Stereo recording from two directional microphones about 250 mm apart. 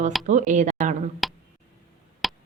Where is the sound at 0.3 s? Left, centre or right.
Right.